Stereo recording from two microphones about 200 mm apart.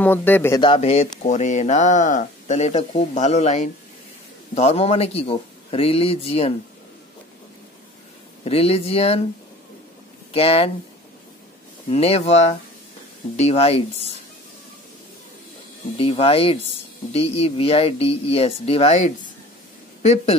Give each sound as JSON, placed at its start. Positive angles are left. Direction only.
{"t": 0.0, "sound": "speech", "side_deg": 10}
{"t": 0.6, "sound": "speech", "side_deg": 30}
{"t": 8.5, "sound": "speech", "side_deg": 30}
{"t": 10.3, "sound": "speech", "side_deg": 30}
{"t": 11.9, "sound": "speech", "side_deg": 30}
{"t": 16.0, "sound": "speech", "side_deg": 30}